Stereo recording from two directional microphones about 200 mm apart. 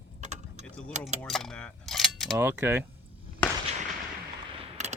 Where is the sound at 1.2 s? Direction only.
5° left (ahead or behind).